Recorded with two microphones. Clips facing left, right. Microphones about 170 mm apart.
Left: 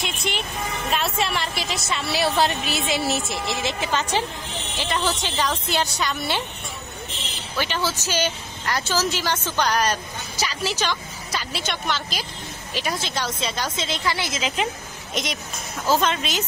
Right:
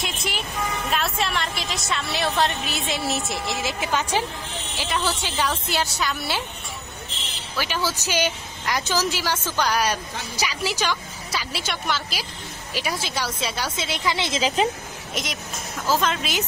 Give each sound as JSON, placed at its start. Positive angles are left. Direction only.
{"t": 0.0, "sound": "vehicle", "side_deg": 0}
{"t": 0.8, "sound": "a woman's voice", "side_deg": 0}
{"t": 5.2, "sound": "a woman's voice", "side_deg": -5}
{"t": 7.5, "sound": "speech", "side_deg": -10}
{"t": 14.1, "sound": "a woman's voice", "side_deg": -25}
{"t": 15.2, "sound": "a woman's voice", "side_deg": -5}